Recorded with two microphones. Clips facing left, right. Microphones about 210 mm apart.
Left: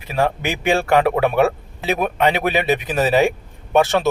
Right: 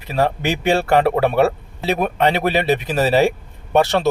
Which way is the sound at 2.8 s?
Centre (ahead or behind).